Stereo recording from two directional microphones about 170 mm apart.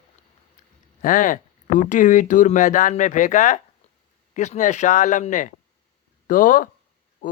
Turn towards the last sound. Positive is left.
turn(degrees=50)  # may be behind; listen again after turning